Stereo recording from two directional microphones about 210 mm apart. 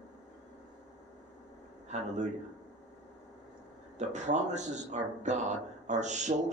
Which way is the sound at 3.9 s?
35° right (ahead or behind).